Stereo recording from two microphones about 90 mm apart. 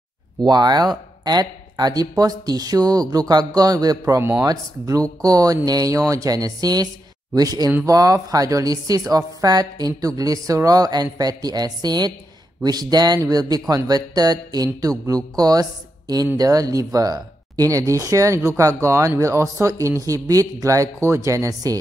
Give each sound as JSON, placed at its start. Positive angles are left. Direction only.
{"t": 0.4, "sound": "speech", "side_deg": -50}